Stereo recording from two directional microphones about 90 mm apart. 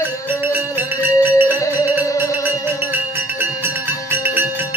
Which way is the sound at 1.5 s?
35° left (ahead or behind).